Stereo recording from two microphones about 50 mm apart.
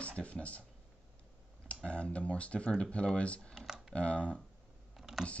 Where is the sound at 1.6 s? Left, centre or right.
Left.